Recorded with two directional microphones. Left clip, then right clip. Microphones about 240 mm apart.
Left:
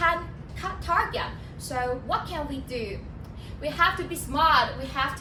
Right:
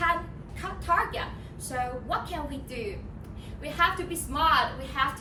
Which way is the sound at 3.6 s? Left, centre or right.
Centre.